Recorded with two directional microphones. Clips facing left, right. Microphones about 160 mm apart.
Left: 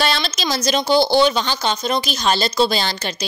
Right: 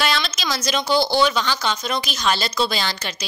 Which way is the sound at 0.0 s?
30° left (ahead or behind).